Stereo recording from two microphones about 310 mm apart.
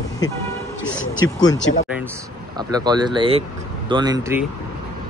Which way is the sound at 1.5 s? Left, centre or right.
Left.